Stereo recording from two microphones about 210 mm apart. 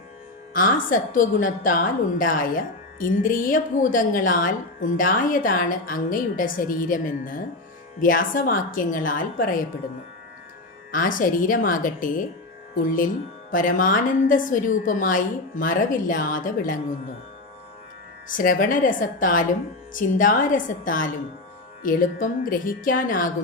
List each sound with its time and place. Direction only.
0.5 s a woman's voice: 40° left (ahead or behind)
10.9 s a woman's voice: 40° left (ahead or behind)
18.3 s a woman's voice: 40° left (ahead or behind)